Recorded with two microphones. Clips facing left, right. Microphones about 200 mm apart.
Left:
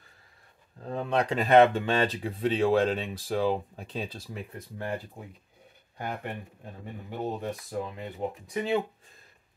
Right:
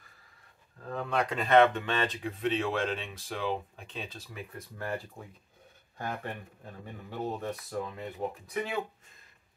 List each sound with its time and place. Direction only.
0.8 s speech: 25° left (ahead or behind)
5.9 s speech: 20° left (ahead or behind)
8.5 s speech: 30° left (ahead or behind)